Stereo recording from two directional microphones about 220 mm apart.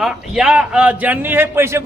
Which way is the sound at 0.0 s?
Centre (ahead or behind).